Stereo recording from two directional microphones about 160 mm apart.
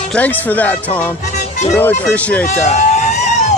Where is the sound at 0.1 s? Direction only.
10° left (ahead or behind).